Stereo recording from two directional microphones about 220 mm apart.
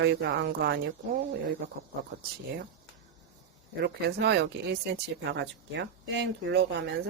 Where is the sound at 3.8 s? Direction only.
50° right (ahead or behind).